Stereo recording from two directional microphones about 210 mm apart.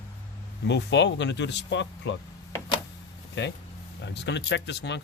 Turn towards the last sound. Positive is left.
turn(degrees=55)  # may be behind; listen again after turning